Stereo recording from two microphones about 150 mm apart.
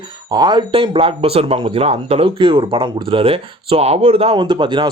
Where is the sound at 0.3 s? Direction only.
30° right (ahead or behind).